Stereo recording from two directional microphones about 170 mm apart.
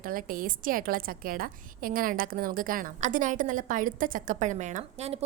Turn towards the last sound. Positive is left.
turn(degrees=-40)  # may be behind; listen again after turning